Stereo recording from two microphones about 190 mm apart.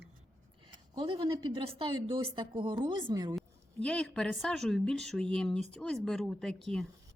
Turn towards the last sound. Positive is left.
turn(degrees=0)  # may be behind; listen again after turning